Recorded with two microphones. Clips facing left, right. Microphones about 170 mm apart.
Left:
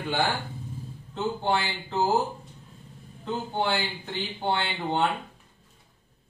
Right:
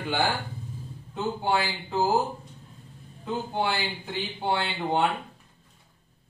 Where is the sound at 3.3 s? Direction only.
10° right (ahead or behind).